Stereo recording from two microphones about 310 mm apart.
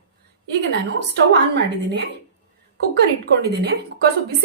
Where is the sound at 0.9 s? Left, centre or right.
Right.